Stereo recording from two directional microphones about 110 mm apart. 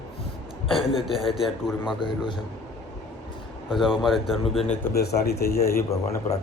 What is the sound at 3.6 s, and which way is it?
Speech, centre (ahead or behind).